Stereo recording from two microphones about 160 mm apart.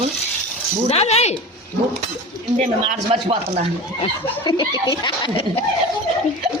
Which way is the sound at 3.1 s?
35° right (ahead or behind).